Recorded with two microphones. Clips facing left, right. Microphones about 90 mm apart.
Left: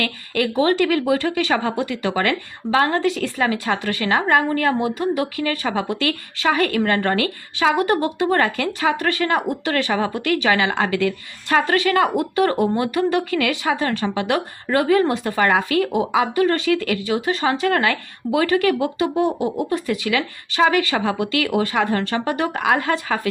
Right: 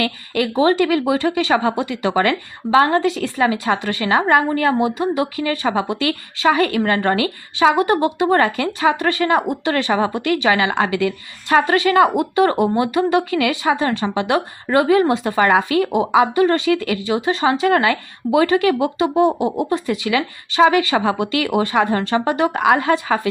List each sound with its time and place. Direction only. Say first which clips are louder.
0.0 s speech: right 2 dB; 20° right (ahead or behind)
10.6 s speech: right 2 dB; 10° right (ahead or behind)
17.0 s speech: right 2 dB; 25° right (ahead or behind)